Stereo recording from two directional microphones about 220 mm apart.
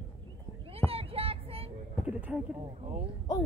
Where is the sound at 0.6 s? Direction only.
25° right (ahead or behind).